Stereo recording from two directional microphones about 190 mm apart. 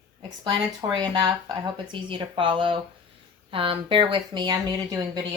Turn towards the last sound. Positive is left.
turn(degrees=-20)  # may be behind; listen again after turning